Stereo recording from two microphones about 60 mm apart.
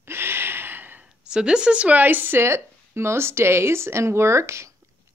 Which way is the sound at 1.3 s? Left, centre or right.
Centre.